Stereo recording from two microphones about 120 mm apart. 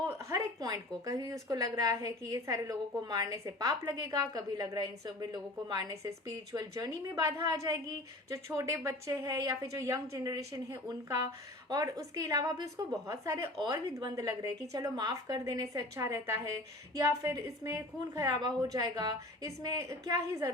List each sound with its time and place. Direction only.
0.2 s a woman's voice: 25° right (ahead or behind)
18.3 s a woman's voice: 35° right (ahead or behind)